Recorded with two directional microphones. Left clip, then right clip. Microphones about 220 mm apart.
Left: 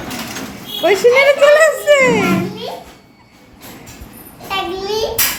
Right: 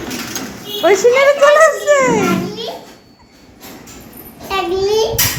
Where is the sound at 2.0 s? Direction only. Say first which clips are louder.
Left 1 dB; 10° left (ahead or behind).